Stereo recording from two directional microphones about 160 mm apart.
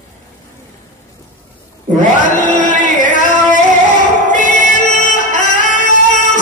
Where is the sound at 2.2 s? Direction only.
55° left (ahead or behind).